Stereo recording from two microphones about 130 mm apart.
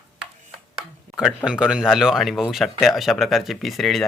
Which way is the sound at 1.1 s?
80° right.